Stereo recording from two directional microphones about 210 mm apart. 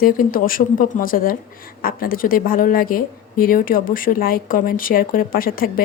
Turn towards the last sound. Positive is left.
turn(degrees=45)  # may be behind; listen again after turning